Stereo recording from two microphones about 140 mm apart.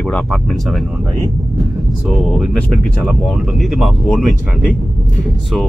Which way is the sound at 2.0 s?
Centre (ahead or behind).